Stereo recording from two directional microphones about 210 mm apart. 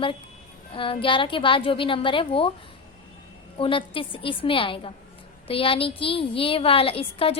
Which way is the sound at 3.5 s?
25° left (ahead or behind).